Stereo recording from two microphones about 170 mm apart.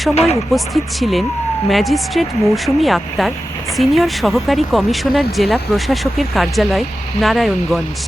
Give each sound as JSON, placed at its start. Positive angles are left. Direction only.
{"t": 0.1, "sound": "speech", "side_deg": 40}
{"t": 0.5, "sound": "speech", "side_deg": 0}